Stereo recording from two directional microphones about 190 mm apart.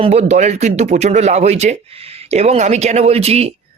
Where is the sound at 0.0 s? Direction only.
35° right (ahead or behind).